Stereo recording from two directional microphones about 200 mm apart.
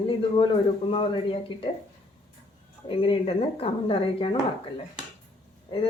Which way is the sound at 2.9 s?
25° left (ahead or behind).